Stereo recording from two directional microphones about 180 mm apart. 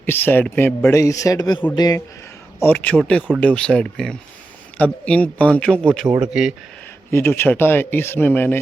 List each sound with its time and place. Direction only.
0.0 s a man's voice: 10° left (ahead or behind)
2.6 s a man's voice: 10° left (ahead or behind)
7.1 s a man's voice: 15° left (ahead or behind)